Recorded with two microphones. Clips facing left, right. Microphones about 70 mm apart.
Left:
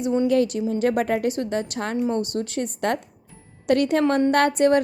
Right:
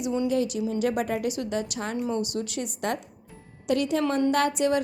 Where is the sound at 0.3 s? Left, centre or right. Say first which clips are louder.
Left 6 dB; left.